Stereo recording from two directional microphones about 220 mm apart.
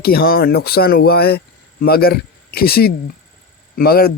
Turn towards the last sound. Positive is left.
turn(degrees=45)  # may be behind; listen again after turning